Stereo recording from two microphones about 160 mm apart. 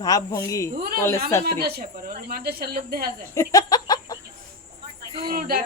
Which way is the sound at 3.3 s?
20° left (ahead or behind).